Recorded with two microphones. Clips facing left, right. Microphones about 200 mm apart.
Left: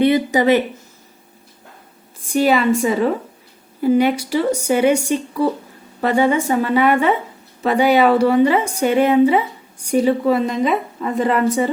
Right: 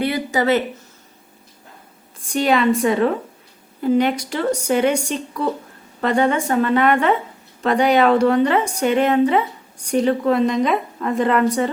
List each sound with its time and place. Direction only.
0.0 s speech: 20° left (ahead or behind)
2.3 s a woman's voice: 5° left (ahead or behind)